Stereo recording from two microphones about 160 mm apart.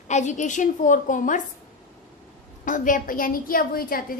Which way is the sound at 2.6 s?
55° left (ahead or behind).